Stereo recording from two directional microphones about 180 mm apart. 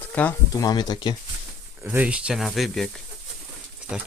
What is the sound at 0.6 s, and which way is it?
Speech, 20° left (ahead or behind).